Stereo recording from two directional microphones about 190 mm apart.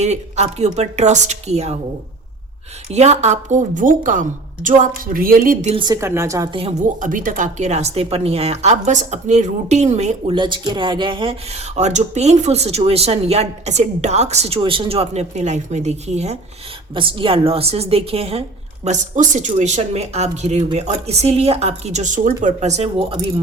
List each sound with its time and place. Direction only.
0.0 s a woman's voice: 35° right (ahead or behind)
2.9 s a woman's voice: 35° right (ahead or behind)
5.7 s a woman's voice: 20° right (ahead or behind)